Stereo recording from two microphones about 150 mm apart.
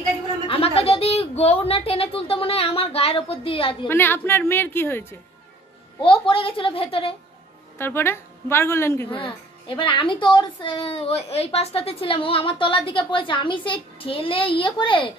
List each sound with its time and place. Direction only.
0.5 s speech: 40° left (ahead or behind)
3.8 s a woman's voice: 15° left (ahead or behind)
5.9 s speech: 35° left (ahead or behind)
7.7 s a woman's voice: 15° left (ahead or behind)
9.1 s speech: 35° left (ahead or behind)